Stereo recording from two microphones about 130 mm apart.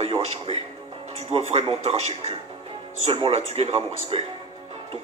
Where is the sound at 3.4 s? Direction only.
55° right (ahead or behind).